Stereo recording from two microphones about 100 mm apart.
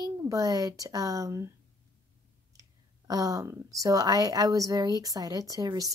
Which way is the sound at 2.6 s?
35° right (ahead or behind).